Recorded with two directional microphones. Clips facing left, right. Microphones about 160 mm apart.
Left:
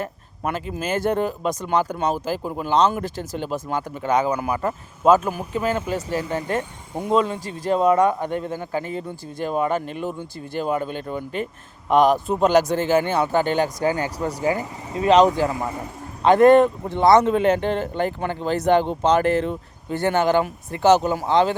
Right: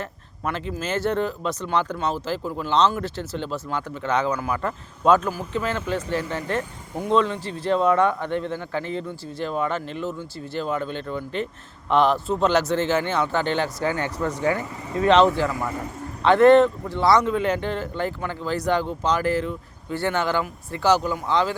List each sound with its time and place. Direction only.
0.0 s speech: 10° left (ahead or behind)
14.3 s speech: 35° left (ahead or behind)
14.5 s speech: 15° left (ahead or behind)
19.2 s speech: 65° left (ahead or behind)
19.9 s speech: 20° left (ahead or behind)